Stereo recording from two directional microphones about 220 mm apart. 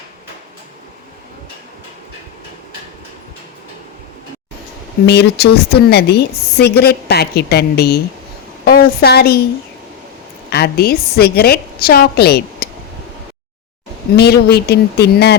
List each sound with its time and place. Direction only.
5.0 s a woman's voice: 50° left (ahead or behind)
10.5 s a woman's voice: 45° left (ahead or behind)
14.2 s a woman's voice: 45° left (ahead or behind)